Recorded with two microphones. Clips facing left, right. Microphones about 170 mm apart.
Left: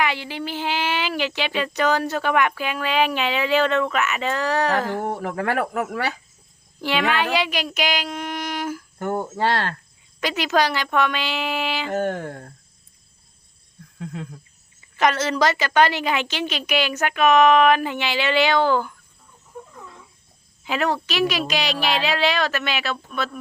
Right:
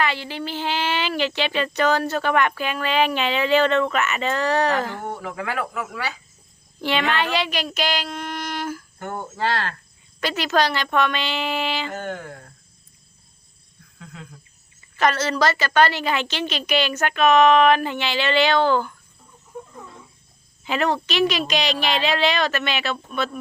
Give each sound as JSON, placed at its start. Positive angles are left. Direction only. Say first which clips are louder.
{"t": 0.0, "sound": "a woman's voice", "louder": "even", "side_deg": 15}
{"t": 5.2, "sound": "speech", "louder": "left 4 dB", "side_deg": 50}
{"t": 6.8, "sound": "a woman's voice", "louder": "left 1 dB", "side_deg": 5}
{"t": 9.0, "sound": "cricket", "louder": "left 6 dB", "side_deg": 40}
{"t": 10.2, "sound": "a woman's voice", "louder": "even", "side_deg": 15}
{"t": 11.9, "sound": "speech", "louder": "left 6 dB", "side_deg": 45}
{"t": 14.0, "sound": "cricket", "louder": "left 9 dB", "side_deg": 40}
{"t": 14.9, "sound": "a woman's voice", "louder": "left 1 dB", "side_deg": 15}
{"t": 20.7, "sound": "speech", "louder": "right 1 dB", "side_deg": 5}